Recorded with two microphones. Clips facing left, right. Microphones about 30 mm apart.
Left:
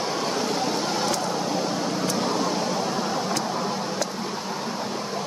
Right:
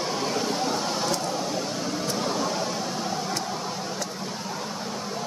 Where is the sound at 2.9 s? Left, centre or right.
Left.